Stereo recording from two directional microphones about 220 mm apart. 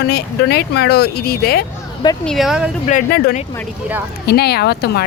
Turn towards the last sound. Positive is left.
turn(degrees=45)  # may be behind; listen again after turning